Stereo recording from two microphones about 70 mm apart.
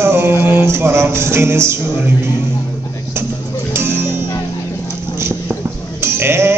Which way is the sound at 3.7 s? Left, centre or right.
Right.